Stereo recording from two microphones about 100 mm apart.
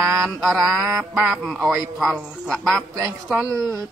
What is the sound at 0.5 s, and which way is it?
A man's voice, 5° right (ahead or behind).